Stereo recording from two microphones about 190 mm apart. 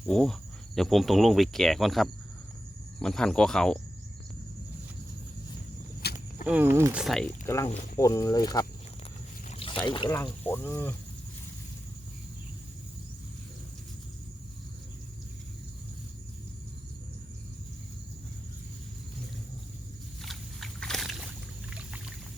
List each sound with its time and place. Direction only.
0.1 s speech: 5° left (ahead or behind)
6.1 s speech: 10° right (ahead or behind)
7.4 s speech: 15° left (ahead or behind)
9.5 s rowboat: 30° left (ahead or behind)
9.8 s speech: 25° left (ahead or behind)
10.1 s speech: 15° left (ahead or behind)
20.2 s a sound: centre (ahead or behind)
21.7 s rowboat: 5° right (ahead or behind)